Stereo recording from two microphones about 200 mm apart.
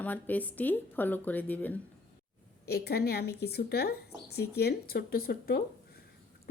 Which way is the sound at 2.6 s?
50° left (ahead or behind).